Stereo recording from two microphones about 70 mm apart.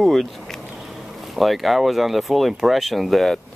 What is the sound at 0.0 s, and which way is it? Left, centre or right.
Speech, centre.